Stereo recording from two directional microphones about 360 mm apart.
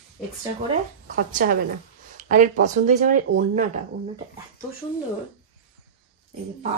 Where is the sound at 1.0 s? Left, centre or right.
Right.